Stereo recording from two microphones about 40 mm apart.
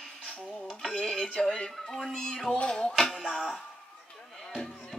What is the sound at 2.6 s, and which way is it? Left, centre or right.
Music, left.